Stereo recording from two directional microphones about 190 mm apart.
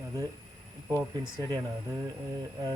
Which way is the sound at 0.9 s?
15° right (ahead or behind).